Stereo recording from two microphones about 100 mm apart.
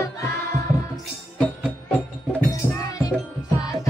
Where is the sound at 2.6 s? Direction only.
15° right (ahead or behind).